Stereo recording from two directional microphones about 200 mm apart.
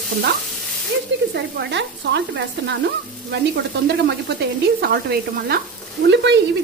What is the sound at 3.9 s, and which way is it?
A woman's voice, 55° right (ahead or behind).